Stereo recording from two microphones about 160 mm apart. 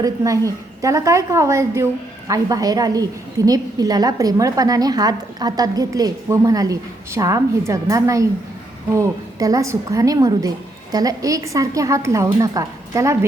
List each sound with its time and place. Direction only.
0.0 s a woman's voice: 20° right (ahead or behind)